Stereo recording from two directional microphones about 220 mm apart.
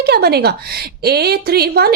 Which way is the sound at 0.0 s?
45° right (ahead or behind).